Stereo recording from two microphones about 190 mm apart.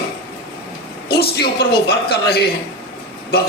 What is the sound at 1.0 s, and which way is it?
A man's voice, 55° left (ahead or behind).